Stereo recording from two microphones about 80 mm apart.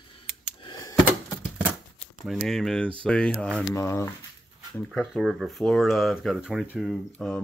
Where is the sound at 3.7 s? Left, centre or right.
Left.